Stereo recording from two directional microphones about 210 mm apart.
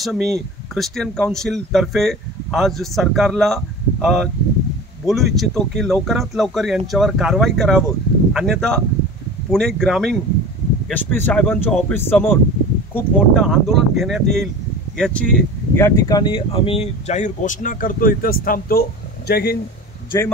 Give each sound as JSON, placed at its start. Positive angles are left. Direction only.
{"t": 0.0, "sound": "speech", "side_deg": 0}
{"t": 15.7, "sound": "speech", "side_deg": 15}